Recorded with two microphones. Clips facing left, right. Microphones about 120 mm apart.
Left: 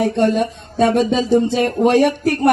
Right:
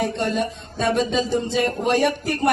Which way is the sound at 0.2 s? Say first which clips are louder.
Left 7 dB; 60° left (ahead or behind).